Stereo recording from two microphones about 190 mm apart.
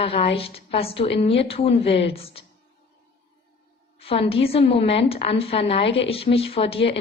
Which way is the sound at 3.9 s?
30° left (ahead or behind).